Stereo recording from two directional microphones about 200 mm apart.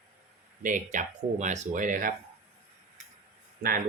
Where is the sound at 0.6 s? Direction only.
40° right (ahead or behind).